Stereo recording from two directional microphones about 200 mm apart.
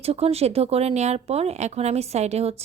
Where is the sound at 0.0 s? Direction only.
30° right (ahead or behind).